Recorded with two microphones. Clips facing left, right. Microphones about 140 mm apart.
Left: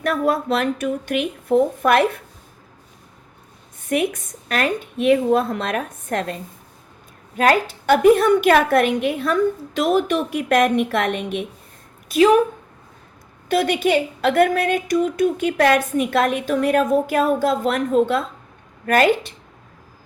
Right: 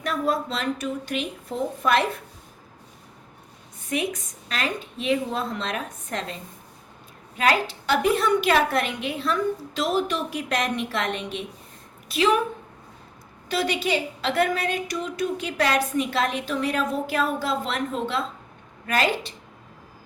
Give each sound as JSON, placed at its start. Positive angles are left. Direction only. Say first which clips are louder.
{"t": 0.0, "sound": "a woman's voice", "louder": "left 5 dB", "side_deg": 60}
{"t": 3.8, "sound": "a woman's voice", "louder": "left 6 dB", "side_deg": 55}
{"t": 7.3, "sound": "a woman's voice", "louder": "left 5 dB", "side_deg": 45}
{"t": 13.5, "sound": "a woman's voice", "louder": "left 7 dB", "side_deg": 55}